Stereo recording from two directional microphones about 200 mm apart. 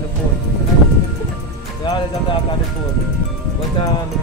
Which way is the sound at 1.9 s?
25° left (ahead or behind).